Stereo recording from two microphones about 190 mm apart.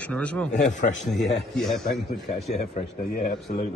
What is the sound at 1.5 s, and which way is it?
Speech, centre (ahead or behind).